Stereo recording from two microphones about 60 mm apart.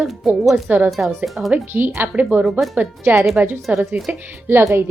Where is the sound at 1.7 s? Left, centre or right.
Right.